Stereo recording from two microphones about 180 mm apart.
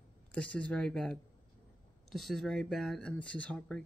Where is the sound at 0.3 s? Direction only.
5° left (ahead or behind).